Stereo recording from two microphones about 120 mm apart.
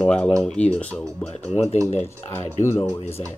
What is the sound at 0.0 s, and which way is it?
Speech, 10° left (ahead or behind).